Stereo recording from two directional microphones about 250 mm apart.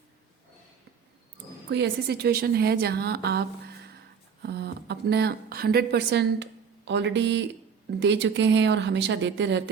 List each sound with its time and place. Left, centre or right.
1.7 s a woman's voice: right
4.4 s a woman's voice: right